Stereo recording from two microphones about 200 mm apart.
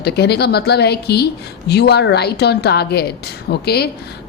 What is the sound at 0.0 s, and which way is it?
A woman's voice, 55° left (ahead or behind).